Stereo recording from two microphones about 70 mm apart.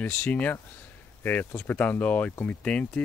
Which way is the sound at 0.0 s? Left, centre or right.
Left.